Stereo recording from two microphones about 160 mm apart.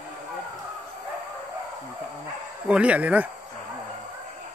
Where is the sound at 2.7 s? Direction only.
10° right (ahead or behind).